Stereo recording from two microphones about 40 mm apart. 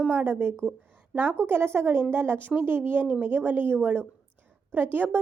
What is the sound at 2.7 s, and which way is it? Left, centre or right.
A woman's voice, right.